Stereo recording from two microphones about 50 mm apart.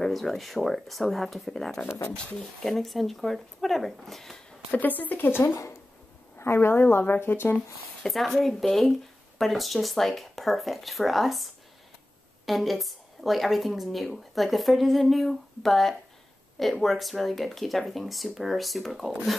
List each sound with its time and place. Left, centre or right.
0.0 s a woman's voice: centre
4.6 s speech: left
6.3 s speech: left
6.8 s speech: left
8.1 s a woman's voice: centre